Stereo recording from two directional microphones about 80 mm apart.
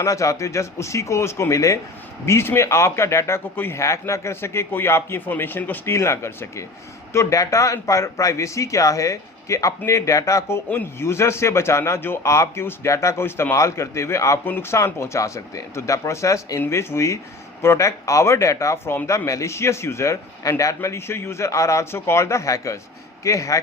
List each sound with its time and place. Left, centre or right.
0.0 s a man's voice: left
3.8 s a man's voice: left
12.2 s a man's voice: left
14.4 s a man's voice: left